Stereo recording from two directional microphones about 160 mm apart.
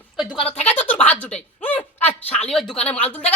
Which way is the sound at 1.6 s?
10° left (ahead or behind).